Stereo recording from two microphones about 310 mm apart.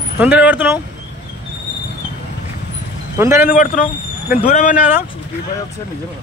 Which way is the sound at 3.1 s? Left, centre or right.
Centre.